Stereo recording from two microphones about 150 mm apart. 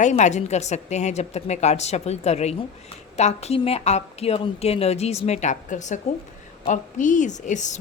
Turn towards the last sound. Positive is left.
turn(degrees=55)  # may be behind; listen again after turning